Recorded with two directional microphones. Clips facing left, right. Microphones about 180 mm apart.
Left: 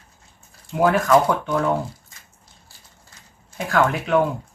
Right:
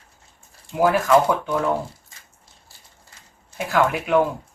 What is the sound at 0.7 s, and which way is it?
Speech, 5° right (ahead or behind).